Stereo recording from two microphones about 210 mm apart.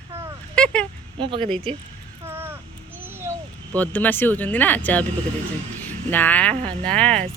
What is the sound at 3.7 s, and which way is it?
Speech, 5° left (ahead or behind).